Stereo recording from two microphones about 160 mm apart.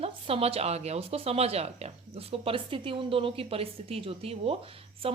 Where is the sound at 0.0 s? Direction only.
35° right (ahead or behind).